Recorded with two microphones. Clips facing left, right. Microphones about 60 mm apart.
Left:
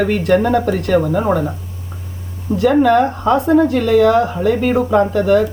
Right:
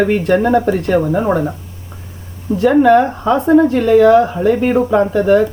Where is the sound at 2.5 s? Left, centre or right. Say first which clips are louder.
Right 1 dB; left.